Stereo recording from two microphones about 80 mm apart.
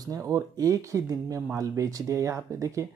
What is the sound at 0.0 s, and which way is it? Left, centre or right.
Speech, right.